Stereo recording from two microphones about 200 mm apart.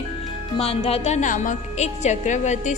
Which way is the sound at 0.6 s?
30° left (ahead or behind).